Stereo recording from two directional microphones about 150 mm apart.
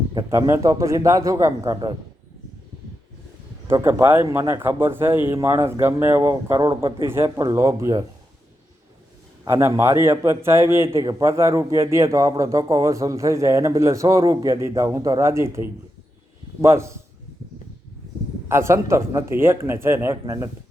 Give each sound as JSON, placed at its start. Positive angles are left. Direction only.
{"t": 0.1, "sound": "a man's voice", "side_deg": -25}
{"t": 3.7, "sound": "speech", "side_deg": -15}
{"t": 9.4, "sound": "a man's voice", "side_deg": -20}
{"t": 18.4, "sound": "speech", "side_deg": -15}